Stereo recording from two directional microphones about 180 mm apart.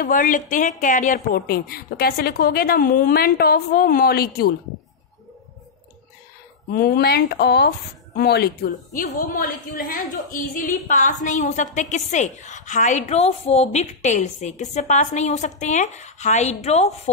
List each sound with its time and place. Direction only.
0.0 s a woman's voice: 50° left (ahead or behind)
6.7 s a woman's voice: 55° left (ahead or behind); by 17.1 s 35° left (ahead or behind)